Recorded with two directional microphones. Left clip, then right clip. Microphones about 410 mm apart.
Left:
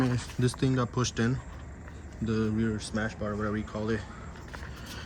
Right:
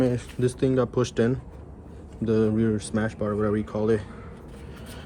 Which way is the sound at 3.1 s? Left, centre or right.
Right.